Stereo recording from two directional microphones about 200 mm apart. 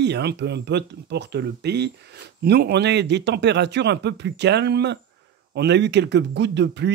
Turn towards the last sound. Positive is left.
turn(degrees=-60)  # may be behind; listen again after turning